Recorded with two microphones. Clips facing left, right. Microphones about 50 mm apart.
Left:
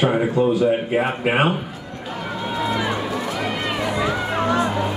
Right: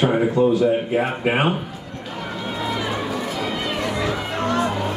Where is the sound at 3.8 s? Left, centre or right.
Centre.